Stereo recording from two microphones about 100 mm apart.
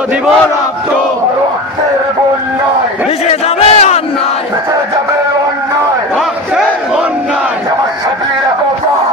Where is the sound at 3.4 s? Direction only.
90° left.